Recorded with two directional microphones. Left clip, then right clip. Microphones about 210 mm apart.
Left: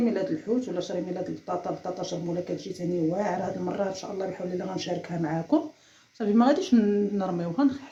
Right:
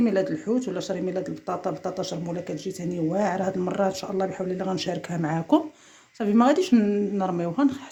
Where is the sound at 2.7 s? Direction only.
55° right (ahead or behind).